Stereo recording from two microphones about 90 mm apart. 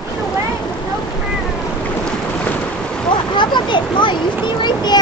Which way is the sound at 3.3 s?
60° left (ahead or behind).